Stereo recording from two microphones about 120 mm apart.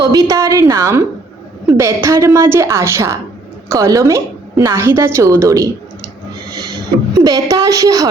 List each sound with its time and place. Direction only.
0.0 s a woman's voice: 30° right (ahead or behind)
7.3 s a woman's voice: 30° right (ahead or behind)